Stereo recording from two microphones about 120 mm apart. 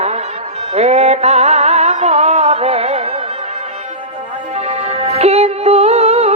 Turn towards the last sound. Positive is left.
turn(degrees=-60)  # may be behind; listen again after turning